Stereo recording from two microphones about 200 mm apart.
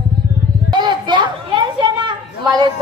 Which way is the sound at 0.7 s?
20° right (ahead or behind).